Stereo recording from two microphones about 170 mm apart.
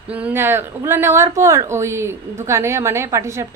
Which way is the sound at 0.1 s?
10° right (ahead or behind).